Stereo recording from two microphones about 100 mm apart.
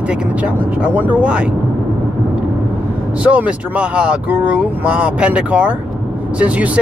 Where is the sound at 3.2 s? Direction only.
15° right (ahead or behind).